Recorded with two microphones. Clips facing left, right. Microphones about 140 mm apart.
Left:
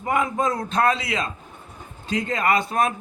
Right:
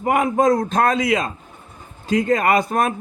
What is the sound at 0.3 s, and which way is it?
Speech, 40° right (ahead or behind).